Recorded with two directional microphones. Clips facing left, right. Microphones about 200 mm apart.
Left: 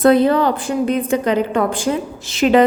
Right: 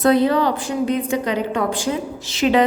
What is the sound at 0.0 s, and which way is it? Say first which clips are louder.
A woman's voice: left 3 dB; 50° left (ahead or behind).